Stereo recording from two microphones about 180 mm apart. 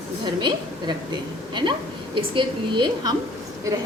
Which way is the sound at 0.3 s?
25° right (ahead or behind).